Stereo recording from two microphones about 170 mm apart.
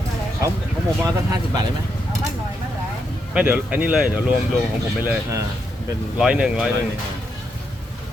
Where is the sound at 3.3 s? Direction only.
10° right (ahead or behind).